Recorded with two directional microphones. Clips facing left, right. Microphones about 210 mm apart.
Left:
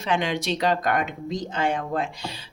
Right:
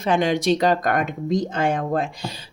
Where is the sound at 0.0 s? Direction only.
45° right (ahead or behind).